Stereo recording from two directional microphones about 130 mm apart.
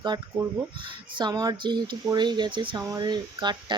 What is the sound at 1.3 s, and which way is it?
Speech, 30° right (ahead or behind).